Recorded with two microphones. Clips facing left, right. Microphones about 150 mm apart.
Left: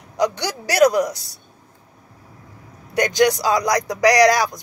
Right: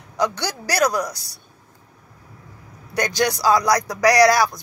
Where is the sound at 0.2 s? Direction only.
20° left (ahead or behind).